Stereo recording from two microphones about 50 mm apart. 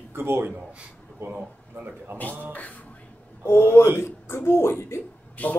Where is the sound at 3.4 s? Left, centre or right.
Left.